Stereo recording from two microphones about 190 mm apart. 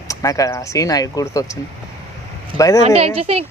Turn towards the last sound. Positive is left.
turn(degrees=-30)  # may be behind; listen again after turning